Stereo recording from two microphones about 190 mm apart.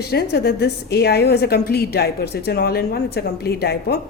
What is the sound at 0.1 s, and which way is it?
Speech, 55° left (ahead or behind).